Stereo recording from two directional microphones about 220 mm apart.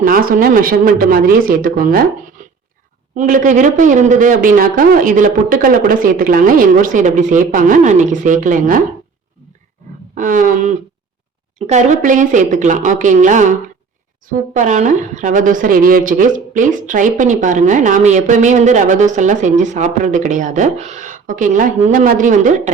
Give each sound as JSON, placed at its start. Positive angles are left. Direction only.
{"t": 0.0, "sound": "a woman's voice", "side_deg": -40}
{"t": 2.4, "sound": "a sound", "side_deg": -35}
{"t": 3.2, "sound": "a woman's voice", "side_deg": -35}
{"t": 10.2, "sound": "a woman's voice", "side_deg": -35}